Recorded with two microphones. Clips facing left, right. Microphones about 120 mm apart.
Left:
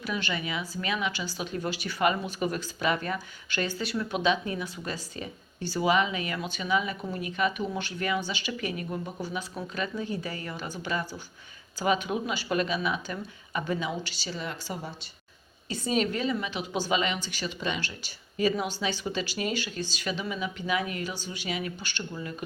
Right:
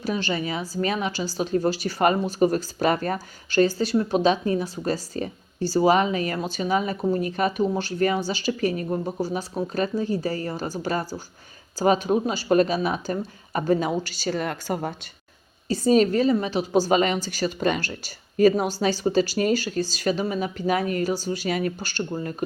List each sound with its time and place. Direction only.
0.0 s a woman's voice: 35° right (ahead or behind); by 14.9 s 55° right (ahead or behind)
15.7 s a woman's voice: 35° right (ahead or behind)